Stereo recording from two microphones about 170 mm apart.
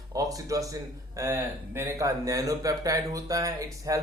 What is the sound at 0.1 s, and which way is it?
A man's voice, 20° right (ahead or behind).